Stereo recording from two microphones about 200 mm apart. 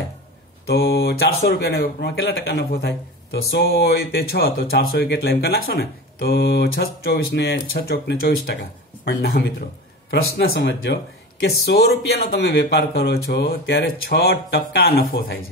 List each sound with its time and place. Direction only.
0.7 s speech: 50° left (ahead or behind)